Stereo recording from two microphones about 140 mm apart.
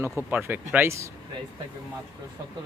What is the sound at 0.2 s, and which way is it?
Speech, 15° right (ahead or behind).